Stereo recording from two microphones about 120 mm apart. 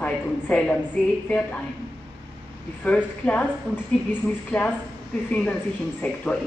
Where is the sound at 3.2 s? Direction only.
10° left (ahead or behind).